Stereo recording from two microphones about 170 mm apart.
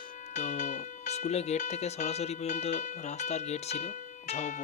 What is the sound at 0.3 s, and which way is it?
Speech, 45° left (ahead or behind).